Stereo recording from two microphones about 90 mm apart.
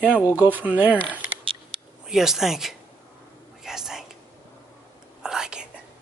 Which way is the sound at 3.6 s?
5° right (ahead or behind).